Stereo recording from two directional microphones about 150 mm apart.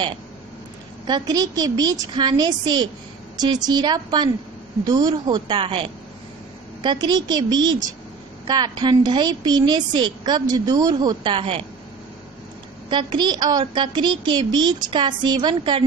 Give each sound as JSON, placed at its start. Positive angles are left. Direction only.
{"t": 1.0, "sound": "a woman's voice", "side_deg": -25}
{"t": 12.9, "sound": "a woman's voice", "side_deg": -30}